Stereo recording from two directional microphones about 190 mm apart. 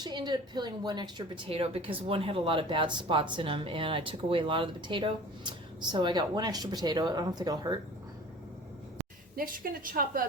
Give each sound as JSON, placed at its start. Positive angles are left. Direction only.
{"t": 0.0, "sound": "a woman's voice", "side_deg": -25}
{"t": 9.3, "sound": "a woman's voice", "side_deg": -50}